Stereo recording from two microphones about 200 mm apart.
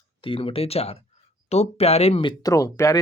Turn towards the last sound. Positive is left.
turn(degrees=15)  # may be behind; listen again after turning